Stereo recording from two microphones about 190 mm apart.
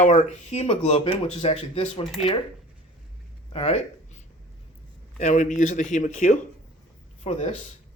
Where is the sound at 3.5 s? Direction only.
35° left (ahead or behind).